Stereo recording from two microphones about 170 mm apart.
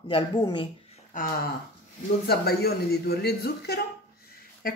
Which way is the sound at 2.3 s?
65° left (ahead or behind).